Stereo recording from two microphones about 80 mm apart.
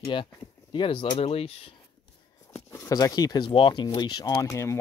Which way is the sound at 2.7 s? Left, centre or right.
Left.